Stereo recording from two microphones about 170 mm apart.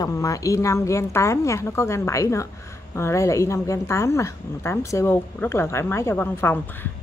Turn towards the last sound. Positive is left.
turn(degrees=15)  # may be behind; listen again after turning